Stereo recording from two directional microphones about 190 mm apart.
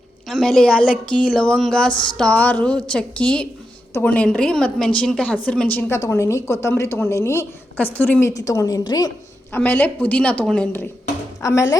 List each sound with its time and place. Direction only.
0.3 s a woman's voice: centre (ahead or behind); by 9.6 s 20° left (ahead or behind)
9.6 s a woman's voice: 10° left (ahead or behind)